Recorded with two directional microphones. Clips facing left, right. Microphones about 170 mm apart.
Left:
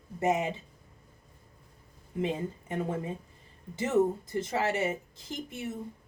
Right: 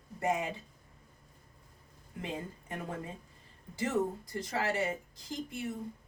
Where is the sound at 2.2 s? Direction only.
20° left (ahead or behind).